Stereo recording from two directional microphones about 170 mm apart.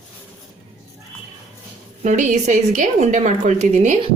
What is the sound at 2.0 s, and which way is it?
A woman's voice, 45° right (ahead or behind).